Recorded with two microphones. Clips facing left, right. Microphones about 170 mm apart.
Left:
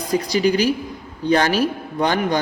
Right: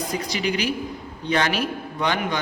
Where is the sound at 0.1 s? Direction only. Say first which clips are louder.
Left 11 dB; 35° left (ahead or behind).